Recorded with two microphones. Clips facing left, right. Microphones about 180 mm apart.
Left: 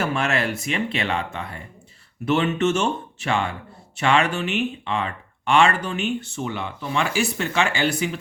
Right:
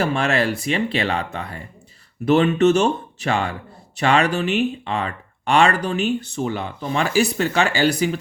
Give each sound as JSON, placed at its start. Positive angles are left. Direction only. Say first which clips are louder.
{"t": 0.0, "sound": "speech", "louder": "right 3 dB", "side_deg": -35}